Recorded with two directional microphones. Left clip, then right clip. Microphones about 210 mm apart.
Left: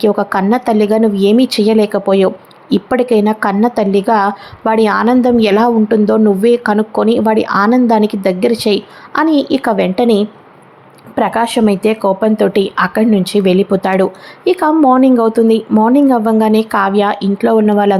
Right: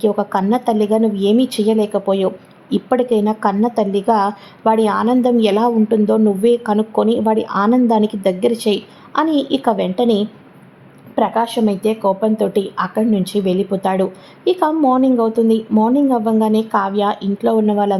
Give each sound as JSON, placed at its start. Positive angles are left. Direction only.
{"t": 0.0, "sound": "speech", "side_deg": 15}